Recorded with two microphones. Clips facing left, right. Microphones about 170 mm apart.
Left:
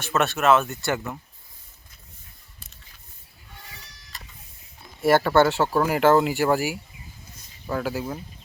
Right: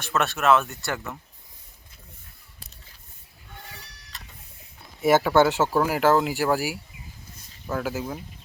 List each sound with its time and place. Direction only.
0.0 s speech: centre (ahead or behind)
3.6 s goat: 60° right (ahead or behind)
5.0 s speech: centre (ahead or behind)